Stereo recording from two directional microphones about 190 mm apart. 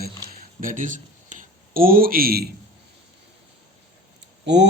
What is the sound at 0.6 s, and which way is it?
Speech, 45° right (ahead or behind).